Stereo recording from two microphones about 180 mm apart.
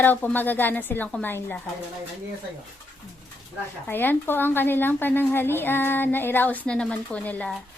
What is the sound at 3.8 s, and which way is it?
A woman's voice, 10° left (ahead or behind).